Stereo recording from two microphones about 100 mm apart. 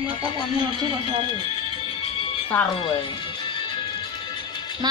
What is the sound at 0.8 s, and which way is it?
Speech, 50° right (ahead or behind).